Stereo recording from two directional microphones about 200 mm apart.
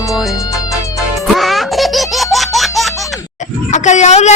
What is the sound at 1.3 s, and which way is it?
Laughter, centre (ahead or behind).